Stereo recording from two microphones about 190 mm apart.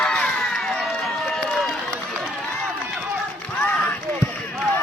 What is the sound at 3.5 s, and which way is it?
Run, 10° left (ahead or behind).